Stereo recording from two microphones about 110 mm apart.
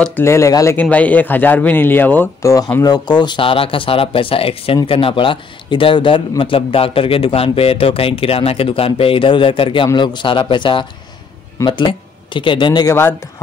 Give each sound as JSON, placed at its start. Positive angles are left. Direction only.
{"t": 0.2, "sound": "speech", "side_deg": 25}
{"t": 0.7, "sound": "speech", "side_deg": 15}
{"t": 2.8, "sound": "a man's voice", "side_deg": 40}
{"t": 12.8, "sound": "speech", "side_deg": 25}